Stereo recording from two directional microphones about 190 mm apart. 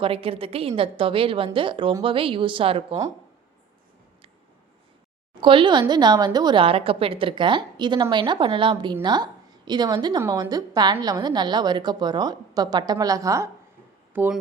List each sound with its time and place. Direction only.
0.0 s a woman's voice: 30° right (ahead or behind)
5.3 s a woman's voice: 25° right (ahead or behind); by 14.3 s 10° right (ahead or behind)